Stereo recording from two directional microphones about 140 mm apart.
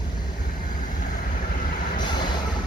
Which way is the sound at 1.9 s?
30° left (ahead or behind).